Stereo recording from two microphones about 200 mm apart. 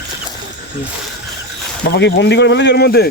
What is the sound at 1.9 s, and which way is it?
Speech, 60° left (ahead or behind).